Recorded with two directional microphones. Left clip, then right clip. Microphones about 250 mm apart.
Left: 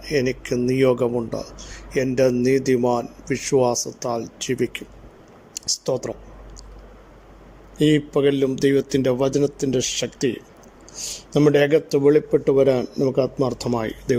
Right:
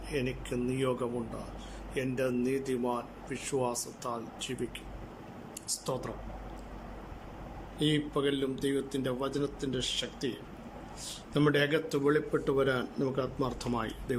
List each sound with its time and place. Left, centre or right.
0.0 s a man's voice: left
7.8 s a man's voice: left
11.3 s a man's voice: left